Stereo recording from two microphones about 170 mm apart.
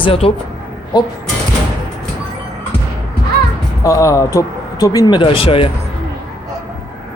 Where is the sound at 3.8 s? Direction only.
20° left (ahead or behind).